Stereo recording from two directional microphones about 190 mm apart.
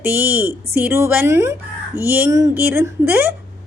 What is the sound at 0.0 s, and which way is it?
A woman's voice, 10° right (ahead or behind).